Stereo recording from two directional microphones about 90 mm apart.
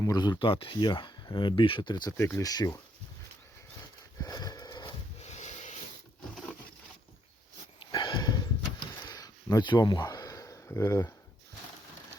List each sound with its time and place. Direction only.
0.0 s speech: 45° left (ahead or behind)
0.3 s speech: 80° left; by 2.1 s 50° left (ahead or behind)
2.1 s speech: 30° left (ahead or behind)
2.4 s speech: 45° left (ahead or behind)
4.2 s sniff: 45° left (ahead or behind)
7.8 s a sound: 60° left (ahead or behind); by 11.1 s 35° left (ahead or behind)